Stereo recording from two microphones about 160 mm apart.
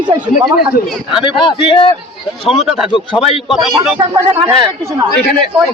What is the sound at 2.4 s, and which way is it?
Speech, centre (ahead or behind).